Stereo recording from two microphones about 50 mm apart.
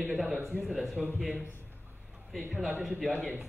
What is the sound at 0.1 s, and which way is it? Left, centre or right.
Speech, centre.